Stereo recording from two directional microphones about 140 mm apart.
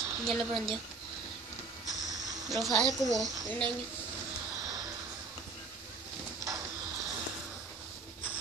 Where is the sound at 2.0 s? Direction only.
25° right (ahead or behind).